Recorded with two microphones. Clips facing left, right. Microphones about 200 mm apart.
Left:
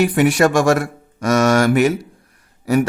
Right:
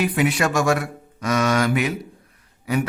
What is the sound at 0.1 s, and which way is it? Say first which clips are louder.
A man's voice: left 6 dB; 50° left (ahead or behind).